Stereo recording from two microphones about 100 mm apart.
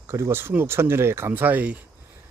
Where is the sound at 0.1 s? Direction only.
25° right (ahead or behind).